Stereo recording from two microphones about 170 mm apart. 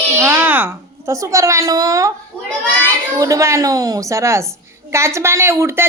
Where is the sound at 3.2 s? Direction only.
20° right (ahead or behind).